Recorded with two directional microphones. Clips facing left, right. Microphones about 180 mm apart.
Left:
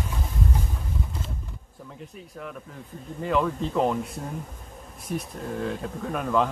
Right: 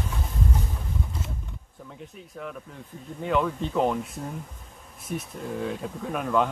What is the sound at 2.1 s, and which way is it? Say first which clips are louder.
Speech: right 1 dB; centre (ahead or behind).